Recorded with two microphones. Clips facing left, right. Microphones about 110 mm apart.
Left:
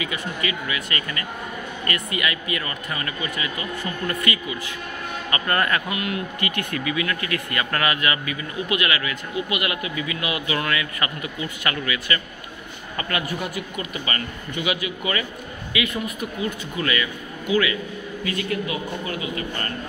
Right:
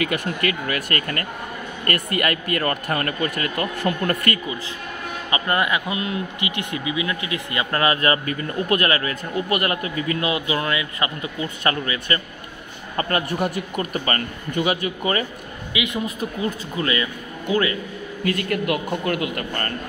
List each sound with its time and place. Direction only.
0.0 s speech: 55° right (ahead or behind)
5.3 s speech: 15° right (ahead or behind); by 10.3 s 40° right (ahead or behind)
10.3 s speech: 25° right (ahead or behind)
15.7 s a man's voice: 20° right (ahead or behind)
16.2 s speech: 35° right (ahead or behind)
18.2 s speech: 55° right (ahead or behind)